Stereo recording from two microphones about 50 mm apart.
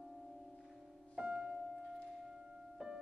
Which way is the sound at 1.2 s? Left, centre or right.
Centre.